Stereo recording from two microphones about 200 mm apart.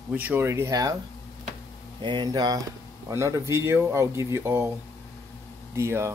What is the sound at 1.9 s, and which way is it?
Speech, 25° right (ahead or behind).